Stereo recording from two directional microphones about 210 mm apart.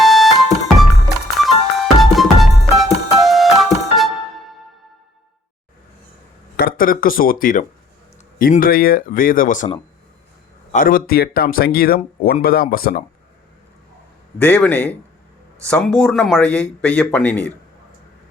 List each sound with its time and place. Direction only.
0.0 s music: centre (ahead or behind)
1.4 s music: centre (ahead or behind)
6.6 s speech: 45° left (ahead or behind)
10.7 s speech: 40° left (ahead or behind)
14.3 s a man's voice: 5° left (ahead or behind)